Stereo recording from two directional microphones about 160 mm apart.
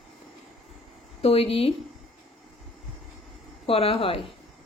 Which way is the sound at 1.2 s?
40° left (ahead or behind).